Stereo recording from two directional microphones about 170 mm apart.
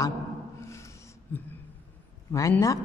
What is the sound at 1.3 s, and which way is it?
Speech, 10° left (ahead or behind).